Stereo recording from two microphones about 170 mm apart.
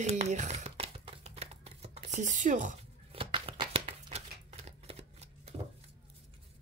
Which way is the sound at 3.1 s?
30° right (ahead or behind).